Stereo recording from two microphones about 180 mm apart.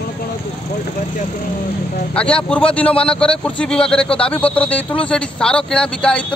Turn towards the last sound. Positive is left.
turn(degrees=5)  # may be behind; listen again after turning